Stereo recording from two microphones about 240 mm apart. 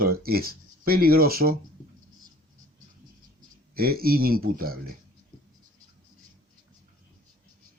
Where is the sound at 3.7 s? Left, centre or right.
Right.